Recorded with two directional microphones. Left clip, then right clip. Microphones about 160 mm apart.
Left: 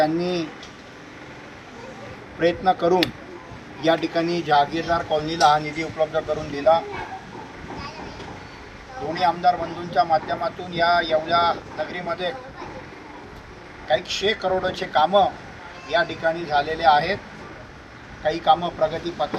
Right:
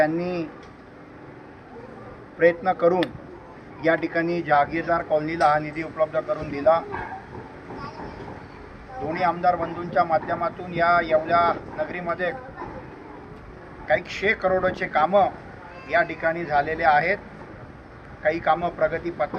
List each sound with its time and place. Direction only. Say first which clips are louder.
0.0 s speech: left 1 dB; 20° left (ahead or behind)
2.4 s speech: right 1 dB; 15° left (ahead or behind)
9.1 s speech: left 2 dB; 15° left (ahead or behind)
13.8 s speech: left 1 dB; 25° left (ahead or behind)
18.2 s speech: left 2 dB; 20° left (ahead or behind)